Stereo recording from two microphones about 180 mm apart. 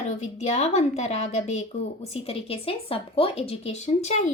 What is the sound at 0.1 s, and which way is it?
Speech, 40° left (ahead or behind).